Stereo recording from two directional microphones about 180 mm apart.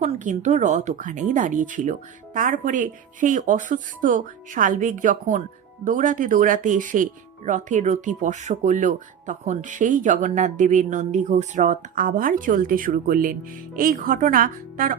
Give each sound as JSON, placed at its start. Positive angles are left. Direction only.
{"t": 0.0, "sound": "speech", "side_deg": -40}